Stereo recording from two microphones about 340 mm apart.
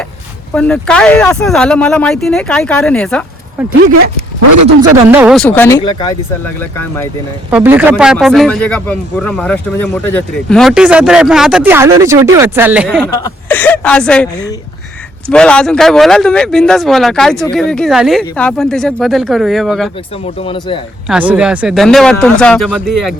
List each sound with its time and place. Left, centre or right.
0.5 s speech: centre
4.8 s speech: centre
7.5 s speech: centre
13.1 s speech: centre
20.2 s speech: centre
21.1 s speech: centre